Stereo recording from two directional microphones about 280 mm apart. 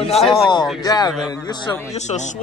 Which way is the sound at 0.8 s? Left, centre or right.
Centre.